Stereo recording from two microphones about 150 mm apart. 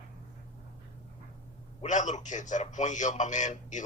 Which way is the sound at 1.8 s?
55° left (ahead or behind).